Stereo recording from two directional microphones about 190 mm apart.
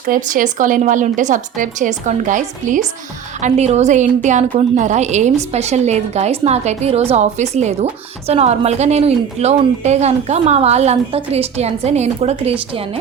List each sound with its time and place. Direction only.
0.1 s a woman's voice: 45° right (ahead or behind)